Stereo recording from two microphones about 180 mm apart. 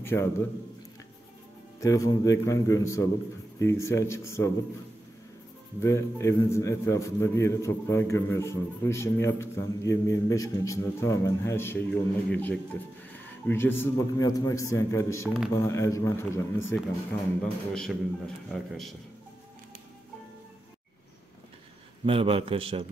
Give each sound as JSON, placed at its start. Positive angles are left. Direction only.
{"t": 0.0, "sound": "a man's voice", "side_deg": 15}
{"t": 1.8, "sound": "a man's voice", "side_deg": 15}
{"t": 5.8, "sound": "a man's voice", "side_deg": 15}
{"t": 15.2, "sound": "a man's voice", "side_deg": 0}
{"t": 15.5, "sound": "a man's voice", "side_deg": 15}
{"t": 17.4, "sound": "a man's voice", "side_deg": 5}
{"t": 22.0, "sound": "a man's voice", "side_deg": -30}